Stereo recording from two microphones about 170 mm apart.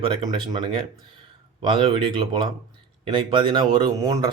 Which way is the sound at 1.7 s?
30° right (ahead or behind).